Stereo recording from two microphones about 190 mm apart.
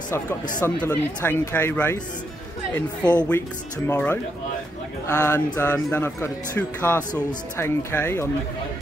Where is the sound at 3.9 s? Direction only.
10° left (ahead or behind).